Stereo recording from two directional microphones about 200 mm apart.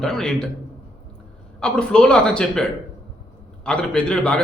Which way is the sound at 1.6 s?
5° left (ahead or behind).